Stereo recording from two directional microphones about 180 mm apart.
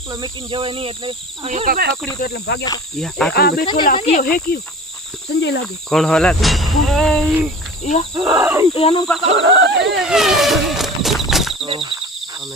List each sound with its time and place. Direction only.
0.1 s speech: 25° right (ahead or behind)
1.6 s speech: 55° right (ahead or behind)
2.2 s speech: 65° left (ahead or behind)
3.0 s speech: 5° left (ahead or behind)
3.3 s insect: 60° left (ahead or behind)
3.9 s speech: 35° left (ahead or behind)
4.2 s insect: 55° left (ahead or behind)
5.3 s speech: 75° left (ahead or behind)
5.9 s speech: 5° left (ahead or behind)
8.1 s speech: 15° right (ahead or behind)
8.7 s speech: 30° left (ahead or behind)
9.3 s speech: 80° right
10.0 s a sound: centre (ahead or behind)
11.6 s speech: 30° right (ahead or behind)